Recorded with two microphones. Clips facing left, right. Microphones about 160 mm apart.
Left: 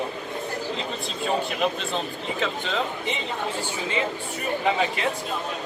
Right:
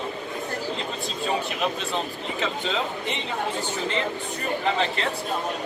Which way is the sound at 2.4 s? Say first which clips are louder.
Even; centre (ahead or behind).